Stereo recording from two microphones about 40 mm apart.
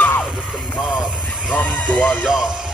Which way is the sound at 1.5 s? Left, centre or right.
Left.